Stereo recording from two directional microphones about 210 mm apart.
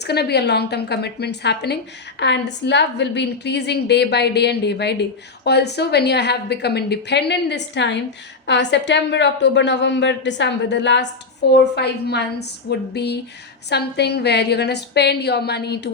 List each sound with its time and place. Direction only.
0.0 s a woman's voice: 50° left (ahead or behind)